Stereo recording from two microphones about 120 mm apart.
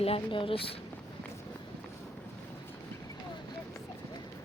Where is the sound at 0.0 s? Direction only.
50° left (ahead or behind).